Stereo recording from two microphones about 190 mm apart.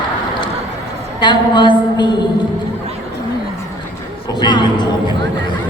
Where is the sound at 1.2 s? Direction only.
25° left (ahead or behind).